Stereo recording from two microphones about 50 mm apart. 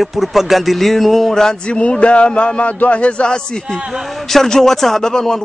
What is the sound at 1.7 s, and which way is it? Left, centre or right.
A man's voice, left.